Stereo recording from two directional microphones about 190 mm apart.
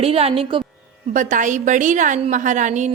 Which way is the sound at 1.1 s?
45° right (ahead or behind).